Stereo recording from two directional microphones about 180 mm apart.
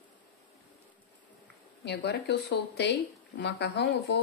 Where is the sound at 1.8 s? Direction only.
70° left (ahead or behind).